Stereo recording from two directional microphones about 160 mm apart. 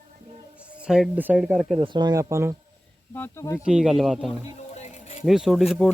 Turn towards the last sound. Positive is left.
turn(degrees=0)  # may be behind; listen again after turning